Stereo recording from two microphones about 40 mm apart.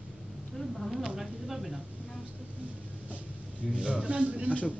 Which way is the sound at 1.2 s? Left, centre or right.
Centre.